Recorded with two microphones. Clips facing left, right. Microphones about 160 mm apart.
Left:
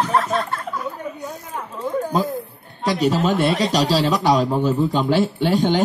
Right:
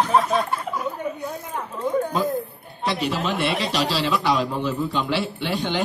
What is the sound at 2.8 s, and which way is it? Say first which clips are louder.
A man's voice: left 6 dB; 40° left (ahead or behind).